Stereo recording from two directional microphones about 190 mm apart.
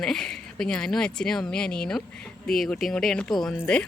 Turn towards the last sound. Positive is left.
turn(degrees=5)  # may be behind; listen again after turning